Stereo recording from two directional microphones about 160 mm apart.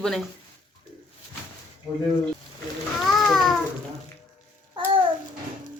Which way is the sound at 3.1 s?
Centre (ahead or behind).